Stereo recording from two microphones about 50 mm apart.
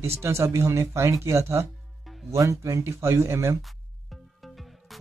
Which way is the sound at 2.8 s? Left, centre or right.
Right.